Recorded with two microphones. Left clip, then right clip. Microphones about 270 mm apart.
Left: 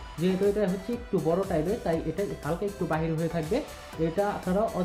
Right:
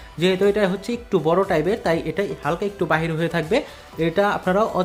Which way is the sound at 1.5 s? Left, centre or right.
Right.